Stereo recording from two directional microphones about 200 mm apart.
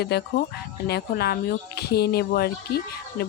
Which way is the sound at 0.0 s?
55° left (ahead or behind).